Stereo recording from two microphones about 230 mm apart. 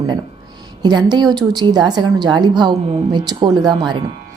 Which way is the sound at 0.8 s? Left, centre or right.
Centre.